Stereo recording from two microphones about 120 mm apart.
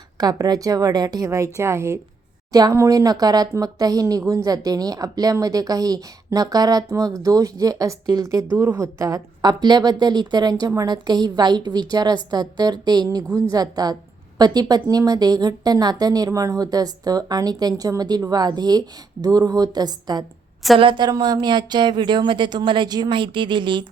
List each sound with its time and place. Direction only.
0.2 s a woman's voice: 35° right (ahead or behind)